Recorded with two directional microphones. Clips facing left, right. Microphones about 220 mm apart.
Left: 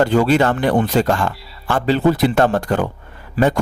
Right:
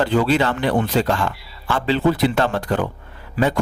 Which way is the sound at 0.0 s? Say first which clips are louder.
Left 3 dB; 45° left (ahead or behind).